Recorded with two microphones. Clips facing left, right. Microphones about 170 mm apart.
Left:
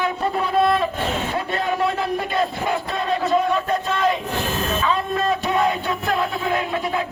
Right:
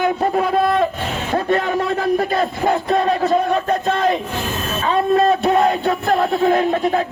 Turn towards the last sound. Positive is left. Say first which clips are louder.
# right 6 dB
turn(degrees=-45)  # may be behind; listen again after turning